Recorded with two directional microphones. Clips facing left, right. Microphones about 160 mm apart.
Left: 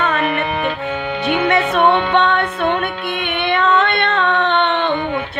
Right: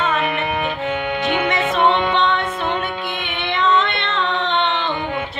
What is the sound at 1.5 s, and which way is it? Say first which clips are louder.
Music: left 4 dB; 60° left (ahead or behind).